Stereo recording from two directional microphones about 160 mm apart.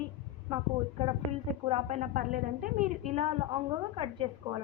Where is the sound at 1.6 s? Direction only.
40° right (ahead or behind).